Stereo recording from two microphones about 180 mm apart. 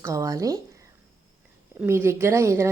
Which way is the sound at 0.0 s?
15° right (ahead or behind).